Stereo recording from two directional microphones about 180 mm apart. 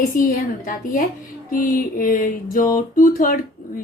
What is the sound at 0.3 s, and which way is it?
A woman's voice, 50° left (ahead or behind).